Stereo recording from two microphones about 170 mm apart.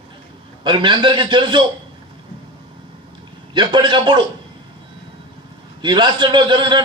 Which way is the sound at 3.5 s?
25° right (ahead or behind).